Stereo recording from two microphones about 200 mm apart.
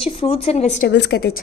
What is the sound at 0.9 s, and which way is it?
Child singing, 55° left (ahead or behind).